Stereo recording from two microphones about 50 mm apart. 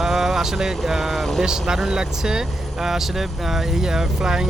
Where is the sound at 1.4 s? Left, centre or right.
Centre.